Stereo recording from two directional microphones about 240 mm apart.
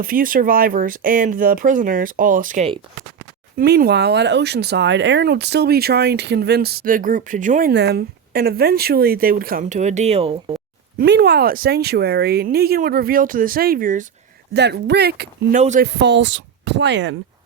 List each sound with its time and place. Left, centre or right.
0.0 s speech: right
10.9 s speech: right
14.5 s speech: right
15.5 s speech: right
15.9 s speech: right